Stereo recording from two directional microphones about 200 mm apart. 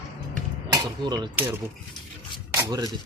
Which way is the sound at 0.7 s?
20° right (ahead or behind).